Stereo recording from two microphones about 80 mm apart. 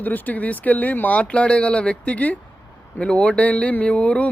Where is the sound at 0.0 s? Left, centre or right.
Left.